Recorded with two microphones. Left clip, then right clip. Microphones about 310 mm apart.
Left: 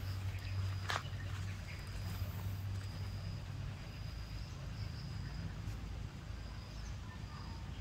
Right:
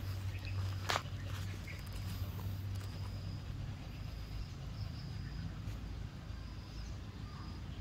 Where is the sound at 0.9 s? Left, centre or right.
Right.